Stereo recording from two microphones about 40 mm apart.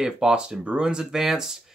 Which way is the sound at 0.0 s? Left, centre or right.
Centre.